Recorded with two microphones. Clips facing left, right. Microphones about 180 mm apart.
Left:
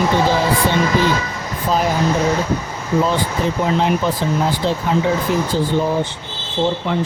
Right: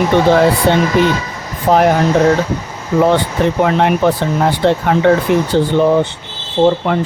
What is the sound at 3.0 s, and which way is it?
Speech, 65° right (ahead or behind).